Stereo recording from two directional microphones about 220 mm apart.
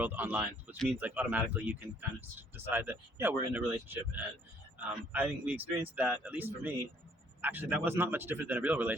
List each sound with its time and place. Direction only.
0.0 s speech: 10° right (ahead or behind)